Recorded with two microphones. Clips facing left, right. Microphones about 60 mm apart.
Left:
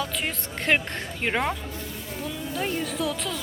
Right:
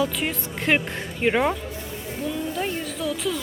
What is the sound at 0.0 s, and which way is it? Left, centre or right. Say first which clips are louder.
A woman's voice: right 5 dB; centre.